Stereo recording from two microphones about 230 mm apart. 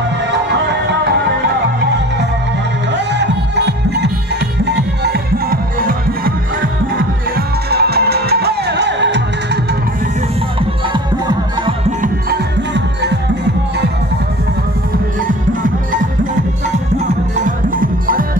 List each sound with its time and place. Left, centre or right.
2.9 s music: right
10.9 s music: right
12.0 s music: right
17.4 s music: right